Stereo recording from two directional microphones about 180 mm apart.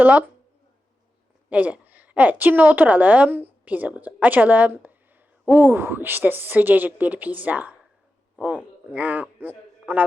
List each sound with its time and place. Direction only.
0.0 s a woman's voice: 10° right (ahead or behind)
1.5 s a woman's voice: 10° right (ahead or behind)